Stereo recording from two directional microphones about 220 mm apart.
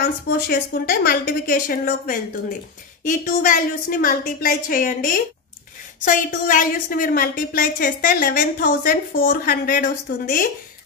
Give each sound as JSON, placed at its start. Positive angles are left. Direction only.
{"t": 0.0, "sound": "a woman's voice", "side_deg": 45}